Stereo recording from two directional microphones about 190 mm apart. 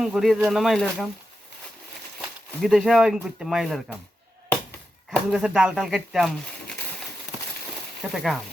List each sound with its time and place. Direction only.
0.0 s speech: centre (ahead or behind)
2.6 s speech: centre (ahead or behind)
5.1 s speech: 5° right (ahead or behind)
8.1 s speech: centre (ahead or behind)